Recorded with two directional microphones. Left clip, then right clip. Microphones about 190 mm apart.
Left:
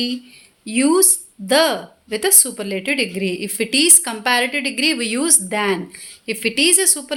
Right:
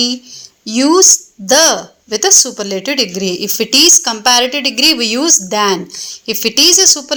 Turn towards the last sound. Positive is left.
turn(degrees=-20)  # may be behind; listen again after turning